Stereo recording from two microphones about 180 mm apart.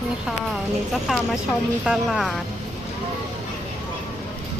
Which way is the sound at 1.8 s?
Centre (ahead or behind).